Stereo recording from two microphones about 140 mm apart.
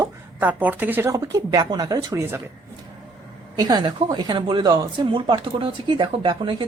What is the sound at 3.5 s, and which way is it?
Speech, 30° right (ahead or behind).